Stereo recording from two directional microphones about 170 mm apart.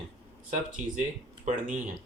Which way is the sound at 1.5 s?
45° right (ahead or behind).